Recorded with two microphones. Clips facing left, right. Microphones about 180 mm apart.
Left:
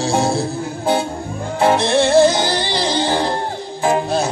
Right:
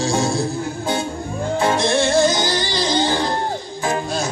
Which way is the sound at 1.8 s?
60° left (ahead or behind).